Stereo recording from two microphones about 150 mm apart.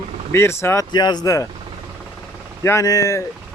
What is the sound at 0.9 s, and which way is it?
Speech, 30° left (ahead or behind).